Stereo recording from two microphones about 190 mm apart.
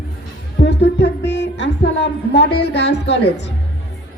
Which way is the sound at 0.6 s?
65° left (ahead or behind).